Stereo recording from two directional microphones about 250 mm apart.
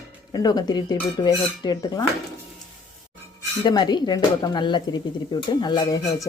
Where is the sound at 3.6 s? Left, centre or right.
Centre.